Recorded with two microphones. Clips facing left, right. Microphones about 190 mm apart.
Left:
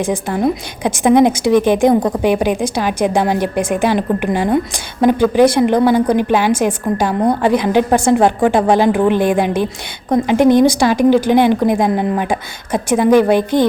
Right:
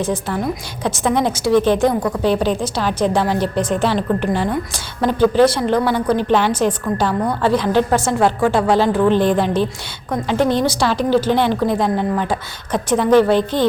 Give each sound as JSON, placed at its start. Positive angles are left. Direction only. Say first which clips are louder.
{"t": 0.0, "sound": "a woman's voice", "louder": "left 4 dB", "side_deg": 15}